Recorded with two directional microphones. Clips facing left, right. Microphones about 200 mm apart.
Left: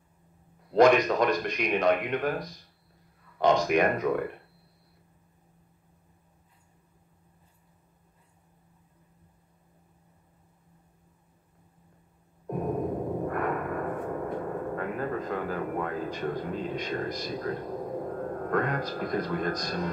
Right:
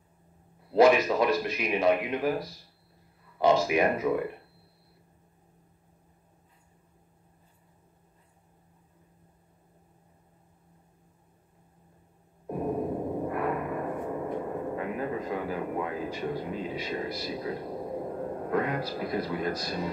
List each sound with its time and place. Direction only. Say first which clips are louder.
0.7 s speech: even; 5° right (ahead or behind)
13.3 s gong: even; 5° right (ahead or behind)